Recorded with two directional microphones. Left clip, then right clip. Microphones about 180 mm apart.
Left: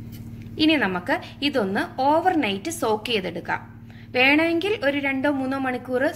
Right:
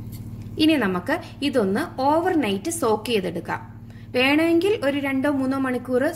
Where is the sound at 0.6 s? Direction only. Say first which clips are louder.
Even; 30° right (ahead or behind).